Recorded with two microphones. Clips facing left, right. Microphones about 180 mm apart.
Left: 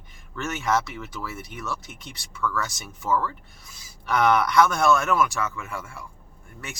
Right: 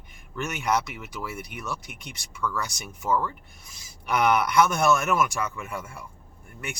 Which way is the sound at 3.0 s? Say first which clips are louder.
Left 1 dB; 20° right (ahead or behind).